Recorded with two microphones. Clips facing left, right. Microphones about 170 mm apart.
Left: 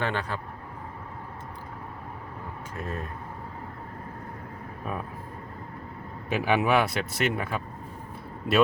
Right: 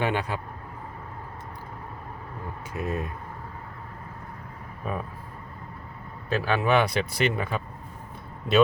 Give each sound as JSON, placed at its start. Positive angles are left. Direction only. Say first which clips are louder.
{"t": 0.0, "sound": "speech", "louder": "right 3 dB", "side_deg": -10}
{"t": 2.7, "sound": "speech", "louder": "right 5 dB", "side_deg": -10}
{"t": 4.8, "sound": "speech", "louder": "right 2 dB", "side_deg": 0}
{"t": 6.2, "sound": "speech", "louder": "even", "side_deg": 15}
{"t": 6.7, "sound": "speech", "louder": "right 2 dB", "side_deg": 0}